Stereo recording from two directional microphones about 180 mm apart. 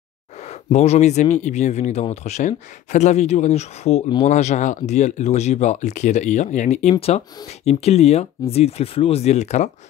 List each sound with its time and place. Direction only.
0.4 s speech: 40° left (ahead or behind)